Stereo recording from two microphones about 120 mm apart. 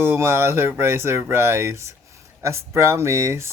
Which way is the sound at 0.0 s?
20° right (ahead or behind).